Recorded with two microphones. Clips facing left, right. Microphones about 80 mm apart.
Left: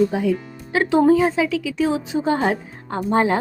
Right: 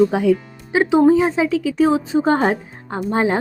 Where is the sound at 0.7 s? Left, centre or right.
Centre; by 2.5 s right.